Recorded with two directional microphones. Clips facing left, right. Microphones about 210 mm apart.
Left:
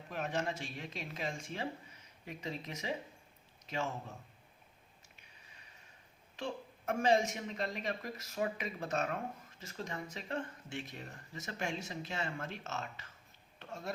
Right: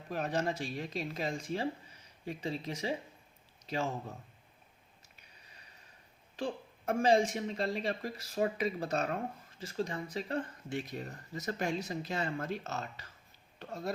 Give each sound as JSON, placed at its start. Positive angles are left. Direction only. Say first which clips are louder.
{"t": 0.1, "sound": "speech", "louder": "right 4 dB", "side_deg": -35}
{"t": 6.3, "sound": "speech", "louder": "right 4 dB", "side_deg": -35}